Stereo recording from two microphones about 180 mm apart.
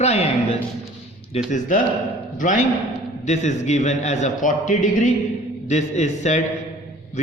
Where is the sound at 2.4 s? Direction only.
45° left (ahead or behind).